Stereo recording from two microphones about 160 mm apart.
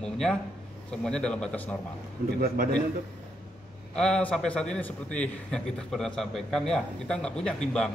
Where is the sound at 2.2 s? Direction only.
70° right (ahead or behind).